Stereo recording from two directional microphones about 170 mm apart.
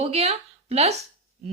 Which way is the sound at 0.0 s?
35° right (ahead or behind).